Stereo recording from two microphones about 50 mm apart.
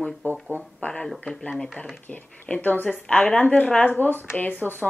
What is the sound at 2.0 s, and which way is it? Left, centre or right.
A woman's voice, left.